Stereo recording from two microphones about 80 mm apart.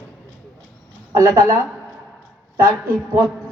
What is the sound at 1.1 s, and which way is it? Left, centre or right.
A man's voice, right.